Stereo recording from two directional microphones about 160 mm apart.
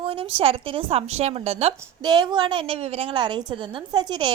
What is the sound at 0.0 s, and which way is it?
A woman's voice, 35° right (ahead or behind).